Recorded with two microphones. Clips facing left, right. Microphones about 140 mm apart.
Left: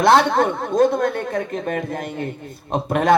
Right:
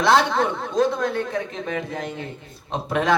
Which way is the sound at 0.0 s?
50° left (ahead or behind).